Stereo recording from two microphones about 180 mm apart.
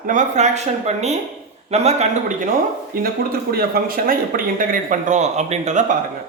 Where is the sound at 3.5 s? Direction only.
55° right (ahead or behind).